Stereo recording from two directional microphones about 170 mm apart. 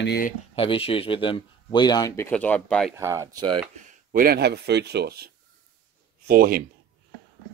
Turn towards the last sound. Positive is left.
turn(degrees=-60)  # may be behind; listen again after turning